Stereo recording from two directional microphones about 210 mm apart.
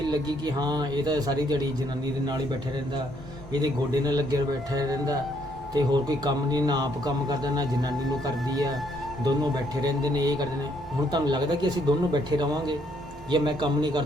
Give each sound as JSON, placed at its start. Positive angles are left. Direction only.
{"t": 0.0, "sound": "speech", "side_deg": -20}
{"t": 3.5, "sound": "a man's voice", "side_deg": -20}